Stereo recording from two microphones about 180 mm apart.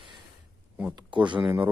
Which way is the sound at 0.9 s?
25° right (ahead or behind).